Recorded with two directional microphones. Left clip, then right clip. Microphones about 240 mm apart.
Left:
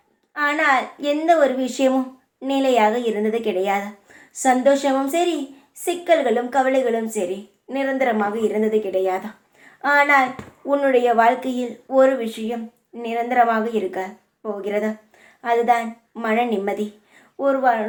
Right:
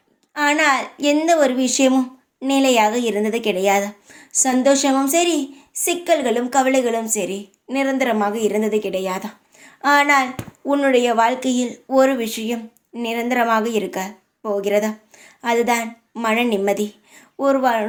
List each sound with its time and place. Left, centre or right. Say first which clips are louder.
0.3 s speech: right 1 dB; right